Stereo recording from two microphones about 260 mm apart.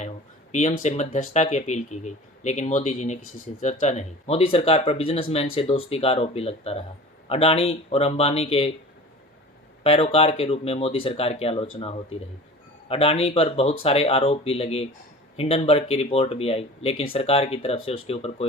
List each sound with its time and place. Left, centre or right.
0.5 s speech: left
9.8 s speech: left
12.9 s speech: left